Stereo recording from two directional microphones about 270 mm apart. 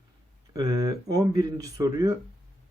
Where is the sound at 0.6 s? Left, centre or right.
Centre.